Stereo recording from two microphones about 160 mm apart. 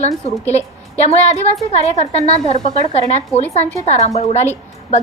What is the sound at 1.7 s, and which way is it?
A woman's voice, 40° left (ahead or behind).